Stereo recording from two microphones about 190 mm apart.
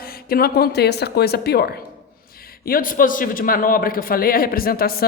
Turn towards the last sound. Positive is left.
turn(degrees=50)  # may be behind; listen again after turning